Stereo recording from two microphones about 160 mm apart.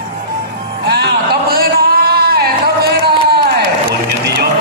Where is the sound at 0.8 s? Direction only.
85° right.